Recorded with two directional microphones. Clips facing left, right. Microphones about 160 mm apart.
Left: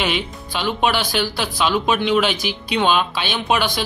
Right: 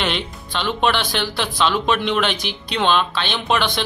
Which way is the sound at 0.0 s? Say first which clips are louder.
Left 1 dB; 5° left (ahead or behind).